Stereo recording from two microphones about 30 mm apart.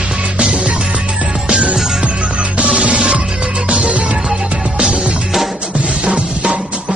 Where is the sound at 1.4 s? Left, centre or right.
Right.